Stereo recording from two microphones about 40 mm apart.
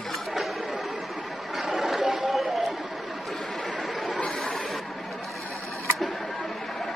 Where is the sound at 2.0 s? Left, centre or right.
Centre.